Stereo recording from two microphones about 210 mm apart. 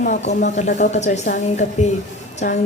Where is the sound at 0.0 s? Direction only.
35° left (ahead or behind).